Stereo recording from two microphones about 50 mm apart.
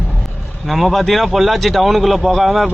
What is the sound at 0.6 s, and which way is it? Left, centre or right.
Speech, centre.